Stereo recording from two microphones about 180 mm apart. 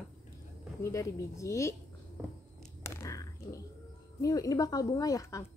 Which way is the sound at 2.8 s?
15° left (ahead or behind).